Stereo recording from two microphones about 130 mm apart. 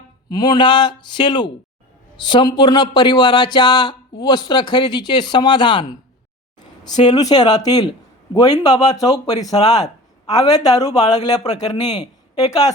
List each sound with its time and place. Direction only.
0.3 s speech: 35° left (ahead or behind)
7.0 s speech: 30° left (ahead or behind)